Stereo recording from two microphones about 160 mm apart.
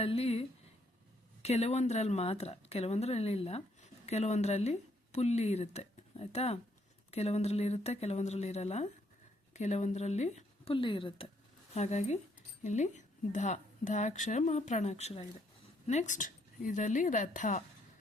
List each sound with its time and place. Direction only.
0.0 s a woman's voice: 40° left (ahead or behind)
11.7 s speech: 45° left (ahead or behind)